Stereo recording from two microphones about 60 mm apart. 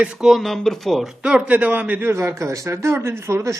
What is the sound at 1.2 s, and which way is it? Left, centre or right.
Speech, right.